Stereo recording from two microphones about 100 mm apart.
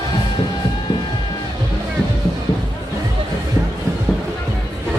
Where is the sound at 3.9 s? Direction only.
30° right (ahead or behind).